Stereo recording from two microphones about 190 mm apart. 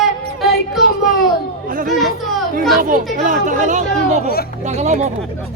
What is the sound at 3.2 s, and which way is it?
Speech, 40° right (ahead or behind).